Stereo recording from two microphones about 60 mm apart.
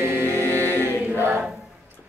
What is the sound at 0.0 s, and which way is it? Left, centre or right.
A capella, right.